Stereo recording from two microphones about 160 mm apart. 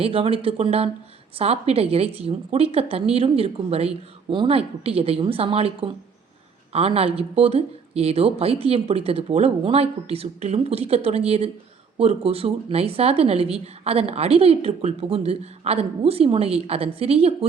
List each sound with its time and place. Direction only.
0.0 s speech: 35° right (ahead or behind)